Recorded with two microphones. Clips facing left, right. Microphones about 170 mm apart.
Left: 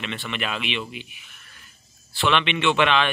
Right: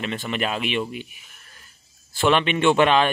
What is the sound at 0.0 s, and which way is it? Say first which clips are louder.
Speech: right 4 dB; 40° right (ahead or behind).